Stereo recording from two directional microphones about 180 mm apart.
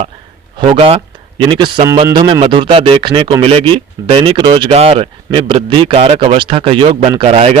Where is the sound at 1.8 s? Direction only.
15° right (ahead or behind).